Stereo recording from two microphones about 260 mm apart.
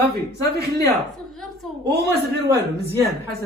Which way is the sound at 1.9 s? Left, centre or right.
Right.